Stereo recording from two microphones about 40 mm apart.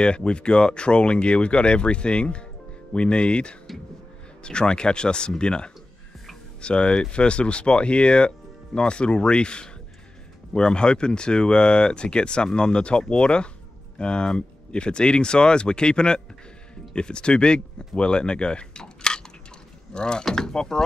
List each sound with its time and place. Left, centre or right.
0.0 s speech: left